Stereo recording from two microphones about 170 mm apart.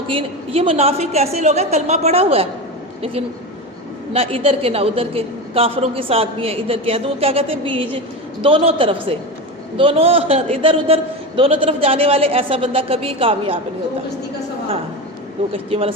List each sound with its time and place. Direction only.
0.1 s a man's voice: 30° right (ahead or behind)
15.5 s a man's voice: 35° right (ahead or behind)